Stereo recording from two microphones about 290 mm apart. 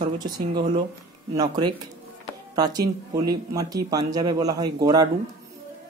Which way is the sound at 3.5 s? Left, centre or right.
Centre.